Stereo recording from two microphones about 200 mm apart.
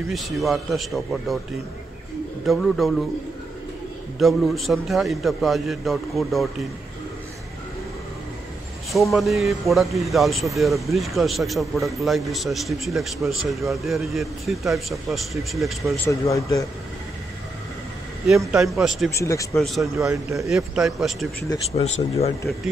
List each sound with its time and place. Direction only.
0.1 s speech: centre (ahead or behind)
2.4 s speech: centre (ahead or behind)
4.2 s speech: centre (ahead or behind)
8.9 s speech: centre (ahead or behind)
16.1 s speech: 15° left (ahead or behind)
18.5 s speech: centre (ahead or behind)
19.1 s speech: 15° left (ahead or behind)
19.5 s speech: centre (ahead or behind)
20.1 s a man's voice: 15° right (ahead or behind)
20.4 s speech: centre (ahead or behind)
21.5 s speech: 30° left (ahead or behind)